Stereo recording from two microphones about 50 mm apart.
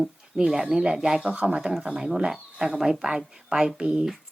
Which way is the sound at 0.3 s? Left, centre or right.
Centre.